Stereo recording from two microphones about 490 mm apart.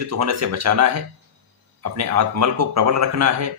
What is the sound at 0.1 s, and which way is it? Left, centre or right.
Speech, right.